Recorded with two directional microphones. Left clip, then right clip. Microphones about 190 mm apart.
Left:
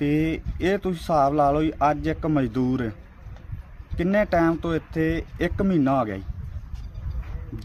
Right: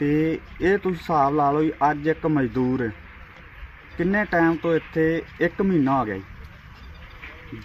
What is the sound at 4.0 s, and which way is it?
Speech, 30° left (ahead or behind).